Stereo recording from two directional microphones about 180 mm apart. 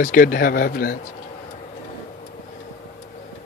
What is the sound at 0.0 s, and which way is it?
Speech, 50° left (ahead or behind).